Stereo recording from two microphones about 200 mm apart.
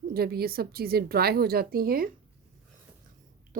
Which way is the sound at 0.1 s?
50° right (ahead or behind).